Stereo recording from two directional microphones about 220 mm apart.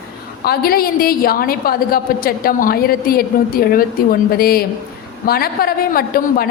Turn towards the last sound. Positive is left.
turn(degrees=40)  # may be behind; listen again after turning